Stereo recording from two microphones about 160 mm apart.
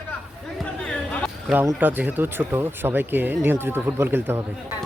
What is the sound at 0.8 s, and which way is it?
Chatter, 5° left (ahead or behind).